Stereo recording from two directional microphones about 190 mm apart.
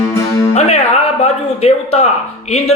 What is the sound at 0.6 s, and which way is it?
A man's voice, 35° left (ahead or behind).